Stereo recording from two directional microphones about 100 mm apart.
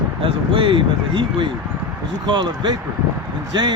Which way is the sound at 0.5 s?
60° right (ahead or behind).